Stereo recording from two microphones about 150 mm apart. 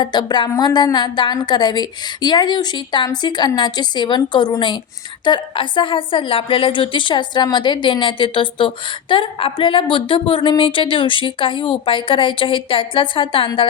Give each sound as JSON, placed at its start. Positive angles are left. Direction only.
{"t": 0.0, "sound": "a woman's voice", "side_deg": 30}